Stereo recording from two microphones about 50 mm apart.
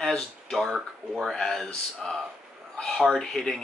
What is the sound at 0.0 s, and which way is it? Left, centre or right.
Speech, centre.